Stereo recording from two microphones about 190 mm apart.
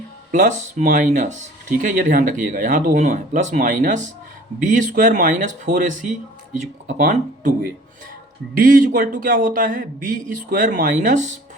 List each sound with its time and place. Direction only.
0.3 s speech: 40° right (ahead or behind)
8.5 s speech: 45° right (ahead or behind)